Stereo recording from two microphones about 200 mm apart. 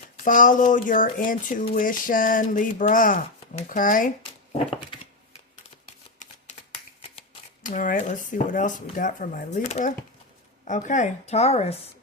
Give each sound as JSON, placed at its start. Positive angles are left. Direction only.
{"t": 0.3, "sound": "speech", "side_deg": 40}
{"t": 6.2, "sound": "shuffling cards", "side_deg": 40}
{"t": 7.2, "sound": "speech", "side_deg": 40}